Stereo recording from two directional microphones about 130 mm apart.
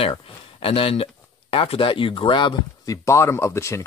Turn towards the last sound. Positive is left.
turn(degrees=20)  # may be behind; listen again after turning